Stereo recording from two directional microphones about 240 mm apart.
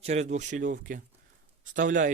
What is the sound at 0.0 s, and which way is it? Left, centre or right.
Speech, right.